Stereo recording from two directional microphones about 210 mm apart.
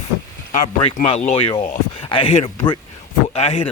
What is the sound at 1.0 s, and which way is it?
Speech, 30° left (ahead or behind).